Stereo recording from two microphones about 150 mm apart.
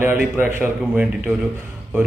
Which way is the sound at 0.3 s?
10° right (ahead or behind).